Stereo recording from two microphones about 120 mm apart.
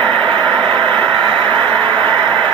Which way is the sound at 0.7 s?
40° right (ahead or behind).